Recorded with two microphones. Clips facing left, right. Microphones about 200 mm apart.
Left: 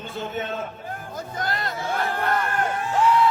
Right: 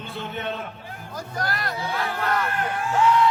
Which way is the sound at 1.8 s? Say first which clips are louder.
Left 2 dB; 50° left (ahead or behind).